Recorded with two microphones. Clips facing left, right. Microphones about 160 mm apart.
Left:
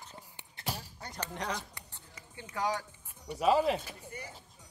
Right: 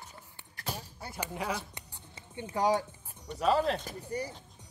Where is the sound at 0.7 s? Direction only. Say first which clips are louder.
Right 2 dB; 10° right (ahead or behind).